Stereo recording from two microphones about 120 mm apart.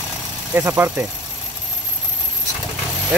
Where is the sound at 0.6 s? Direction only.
20° right (ahead or behind).